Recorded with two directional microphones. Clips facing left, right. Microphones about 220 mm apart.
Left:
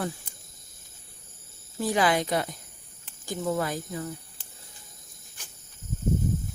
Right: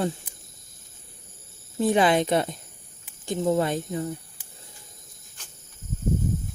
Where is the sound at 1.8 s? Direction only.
25° right (ahead or behind).